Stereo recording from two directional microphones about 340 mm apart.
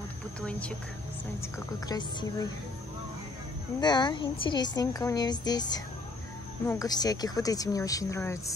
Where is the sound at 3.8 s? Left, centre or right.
Centre.